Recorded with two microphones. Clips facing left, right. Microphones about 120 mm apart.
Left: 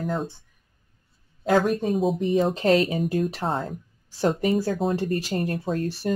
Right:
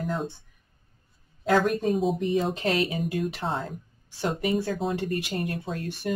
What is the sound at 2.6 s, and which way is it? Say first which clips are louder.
Speech: left 6 dB; 35° left (ahead or behind).